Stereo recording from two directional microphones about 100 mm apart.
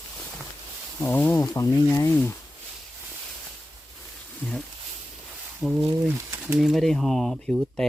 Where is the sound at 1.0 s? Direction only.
20° left (ahead or behind).